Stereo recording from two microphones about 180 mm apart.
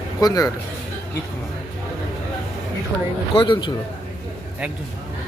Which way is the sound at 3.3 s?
25° left (ahead or behind).